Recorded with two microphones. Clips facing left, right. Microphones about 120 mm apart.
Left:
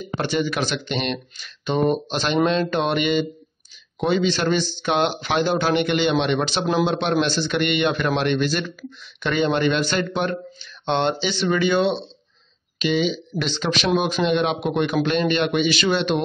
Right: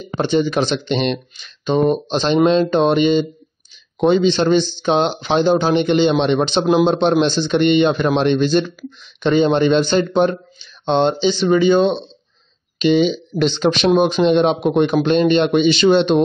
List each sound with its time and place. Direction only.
0.2 s speech: 20° right (ahead or behind)
12.9 s speech: 35° right (ahead or behind)